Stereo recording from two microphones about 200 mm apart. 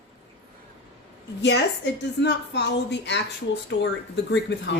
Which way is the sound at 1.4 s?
60° left (ahead or behind).